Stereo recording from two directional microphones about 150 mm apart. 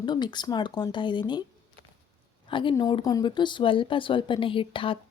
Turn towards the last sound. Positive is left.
turn(degrees=35)  # may be behind; listen again after turning